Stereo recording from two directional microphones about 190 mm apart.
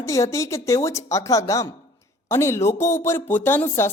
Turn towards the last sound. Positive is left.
turn(degrees=10)  # may be behind; listen again after turning